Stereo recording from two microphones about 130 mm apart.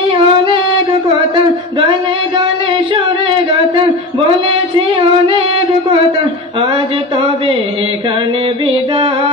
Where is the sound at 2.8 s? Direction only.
40° right (ahead or behind).